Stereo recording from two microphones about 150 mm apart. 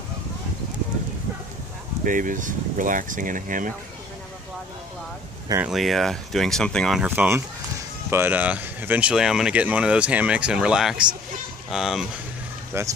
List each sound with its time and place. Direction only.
2.0 s speech: 60° right (ahead or behind)
5.6 s speech: centre (ahead or behind)
7.0 s speech: 15° right (ahead or behind)
12.7 s speech: 15° right (ahead or behind)